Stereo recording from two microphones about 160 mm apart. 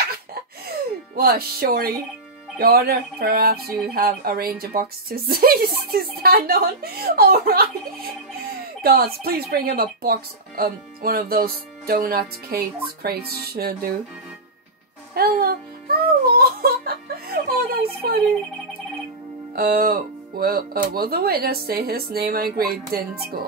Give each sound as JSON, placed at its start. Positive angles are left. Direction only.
{"t": 0.1, "sound": "music", "side_deg": -70}
{"t": 2.6, "sound": "speech", "side_deg": -70}
{"t": 15.1, "sound": "music", "side_deg": -70}
{"t": 19.5, "sound": "speech", "side_deg": -70}